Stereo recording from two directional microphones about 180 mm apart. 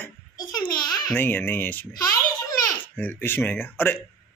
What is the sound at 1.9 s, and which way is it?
Speech, 20° left (ahead or behind).